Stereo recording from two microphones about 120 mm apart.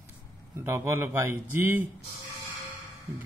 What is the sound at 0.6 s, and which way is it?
A man's voice, 25° right (ahead or behind).